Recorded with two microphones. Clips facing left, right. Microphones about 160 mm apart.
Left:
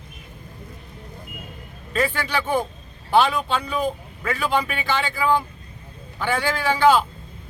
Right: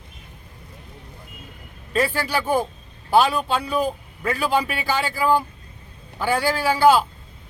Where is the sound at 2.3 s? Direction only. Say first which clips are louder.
Right 1 dB; 10° right (ahead or behind).